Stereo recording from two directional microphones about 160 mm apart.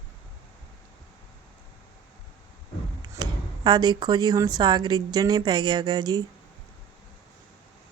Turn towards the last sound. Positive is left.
turn(degrees=-30)  # may be behind; listen again after turning